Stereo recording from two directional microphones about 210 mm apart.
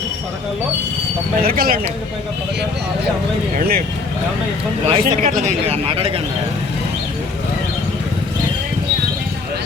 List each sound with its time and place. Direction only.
1.4 s speech: 45° right (ahead or behind)
3.6 s speech: 45° right (ahead or behind)
4.9 s speech: 30° right (ahead or behind)